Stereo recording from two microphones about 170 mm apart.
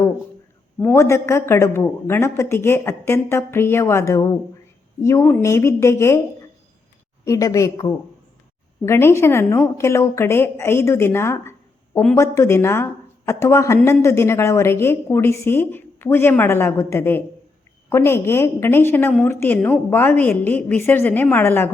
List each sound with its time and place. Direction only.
0.8 s speech: 15° left (ahead or behind)
7.3 s a woman's voice: 20° left (ahead or behind)